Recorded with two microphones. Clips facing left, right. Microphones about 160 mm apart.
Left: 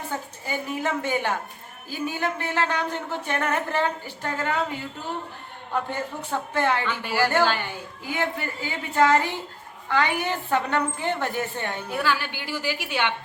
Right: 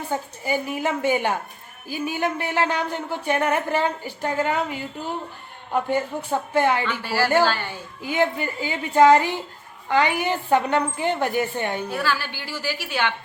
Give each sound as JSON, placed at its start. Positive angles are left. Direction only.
{"t": 0.4, "sound": "speech", "side_deg": -15}
{"t": 5.7, "sound": "speech", "side_deg": -15}
{"t": 7.0, "sound": "a woman's voice", "side_deg": 20}
{"t": 8.0, "sound": "speech", "side_deg": -20}
{"t": 11.9, "sound": "a woman's voice", "side_deg": 15}